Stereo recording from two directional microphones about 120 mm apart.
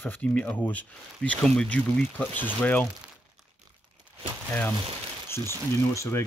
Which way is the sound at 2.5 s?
15° left (ahead or behind).